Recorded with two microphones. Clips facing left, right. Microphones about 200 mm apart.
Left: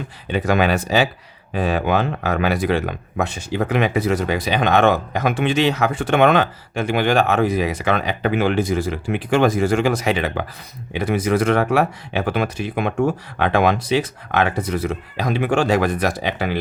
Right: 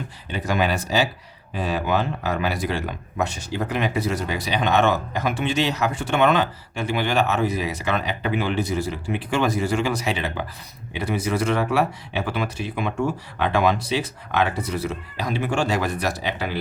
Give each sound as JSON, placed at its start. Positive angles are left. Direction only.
{"t": 0.3, "sound": "speech", "side_deg": 60}